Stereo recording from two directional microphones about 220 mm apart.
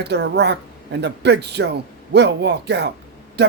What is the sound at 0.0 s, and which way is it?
A man's voice, 50° right (ahead or behind).